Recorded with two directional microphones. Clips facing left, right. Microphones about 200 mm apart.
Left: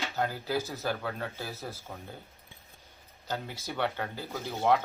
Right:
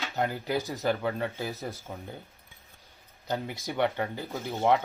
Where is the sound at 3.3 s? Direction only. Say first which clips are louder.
Right 4 dB; 15° right (ahead or behind).